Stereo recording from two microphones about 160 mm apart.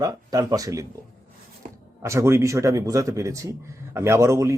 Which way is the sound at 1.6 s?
55° right (ahead or behind).